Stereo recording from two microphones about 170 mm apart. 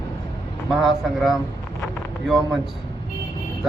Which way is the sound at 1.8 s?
Centre (ahead or behind).